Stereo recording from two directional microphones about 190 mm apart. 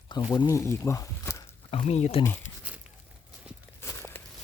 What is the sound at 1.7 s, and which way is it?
Speech, 30° left (ahead or behind).